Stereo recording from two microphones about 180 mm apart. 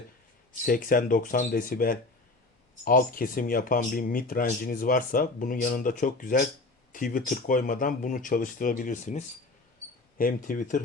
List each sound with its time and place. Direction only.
0.6 s speech: 50° left (ahead or behind)